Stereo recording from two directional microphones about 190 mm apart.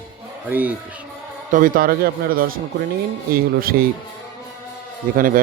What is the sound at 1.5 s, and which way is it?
Speech, 45° right (ahead or behind).